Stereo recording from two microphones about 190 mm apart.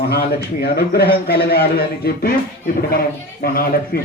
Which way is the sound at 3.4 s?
50° left (ahead or behind).